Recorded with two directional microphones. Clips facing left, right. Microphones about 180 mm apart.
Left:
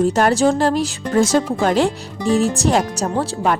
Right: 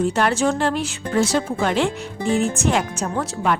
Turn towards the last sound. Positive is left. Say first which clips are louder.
# left 3 dB
turn(degrees=40)  # may be behind; listen again after turning